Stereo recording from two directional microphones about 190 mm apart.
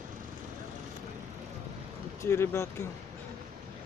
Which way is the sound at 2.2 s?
15° left (ahead or behind).